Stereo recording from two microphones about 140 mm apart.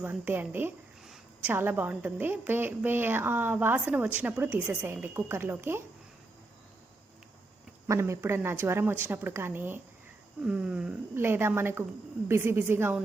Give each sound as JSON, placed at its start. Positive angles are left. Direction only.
{"t": 0.0, "sound": "a woman's voice", "side_deg": -15}
{"t": 1.0, "sound": "a sound", "side_deg": -5}
{"t": 1.5, "sound": "a woman's voice", "side_deg": -15}
{"t": 7.9, "sound": "a woman's voice", "side_deg": -20}
{"t": 11.1, "sound": "a woman's voice", "side_deg": -15}